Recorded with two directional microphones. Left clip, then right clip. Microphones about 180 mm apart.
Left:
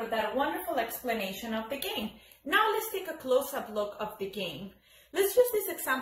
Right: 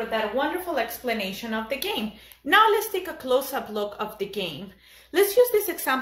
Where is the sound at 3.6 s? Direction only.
65° right (ahead or behind).